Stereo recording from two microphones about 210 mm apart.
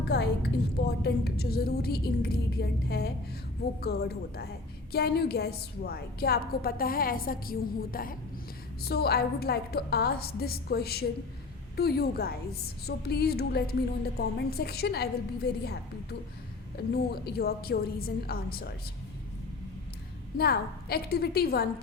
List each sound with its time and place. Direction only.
0.0 s a woman's voice: 50° left (ahead or behind)
17.1 s a woman's voice: 50° left (ahead or behind)
20.4 s a woman's voice: 45° left (ahead or behind)